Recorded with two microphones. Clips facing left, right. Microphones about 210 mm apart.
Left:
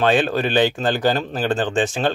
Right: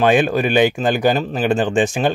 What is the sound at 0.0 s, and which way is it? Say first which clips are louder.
Speech: right 3 dB; 15° right (ahead or behind).